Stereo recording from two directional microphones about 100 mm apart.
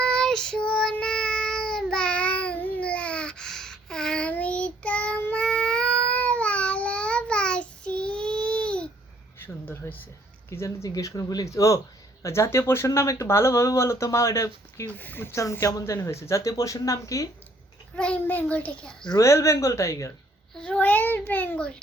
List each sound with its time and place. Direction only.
0.0 s child singing: 5° left (ahead or behind)
9.4 s a sound: 25° left (ahead or behind)
10.5 s speech: 30° left (ahead or behind)
14.9 s speech: 20° left (ahead or behind)
17.9 s a child's voice: 10° left (ahead or behind)
19.2 s speech: 30° left (ahead or behind)
20.5 s a sound: 10° left (ahead or behind)